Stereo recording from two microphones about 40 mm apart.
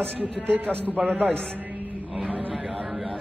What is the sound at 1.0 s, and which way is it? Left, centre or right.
Speech, right.